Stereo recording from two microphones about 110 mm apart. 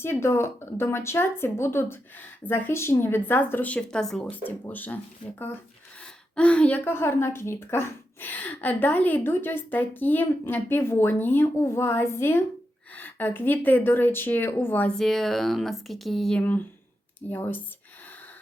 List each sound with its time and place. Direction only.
0.0 s speech: 25° left (ahead or behind); by 4.3 s 5° left (ahead or behind)
4.3 s speech: 15° left (ahead or behind)
6.3 s speech: 10° left (ahead or behind)
14.9 s speech: centre (ahead or behind)
16.4 s speech: 15° left (ahead or behind)